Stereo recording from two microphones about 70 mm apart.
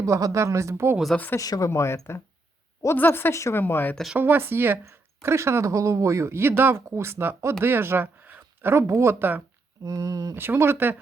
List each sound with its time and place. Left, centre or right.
0.0 s speech: right
1.1 s speech: left
1.4 s speech: left
2.9 s a woman's voice: left
3.6 s speech: left
4.2 s a woman's voice: right
8.7 s a woman's voice: right
9.8 s speech: right
10.3 s a woman's voice: right